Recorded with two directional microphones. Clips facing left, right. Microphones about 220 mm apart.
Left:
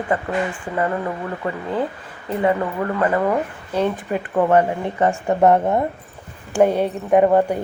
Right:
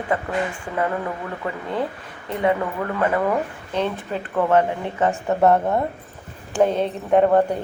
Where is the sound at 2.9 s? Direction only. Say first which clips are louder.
Left 1 dB; centre (ahead or behind).